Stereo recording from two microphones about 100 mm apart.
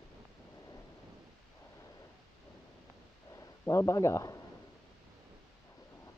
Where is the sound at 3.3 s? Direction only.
30° left (ahead or behind).